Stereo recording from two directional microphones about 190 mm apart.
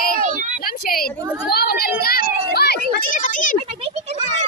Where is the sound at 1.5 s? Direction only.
55° left (ahead or behind).